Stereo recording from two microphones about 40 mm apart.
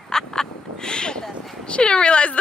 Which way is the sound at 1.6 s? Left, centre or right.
Left.